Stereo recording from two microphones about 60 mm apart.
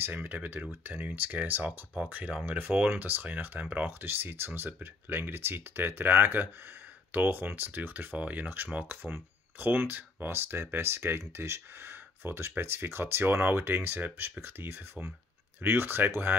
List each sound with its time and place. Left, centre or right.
0.0 s speech: right